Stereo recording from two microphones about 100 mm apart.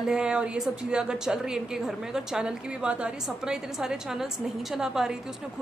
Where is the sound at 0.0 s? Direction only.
10° right (ahead or behind).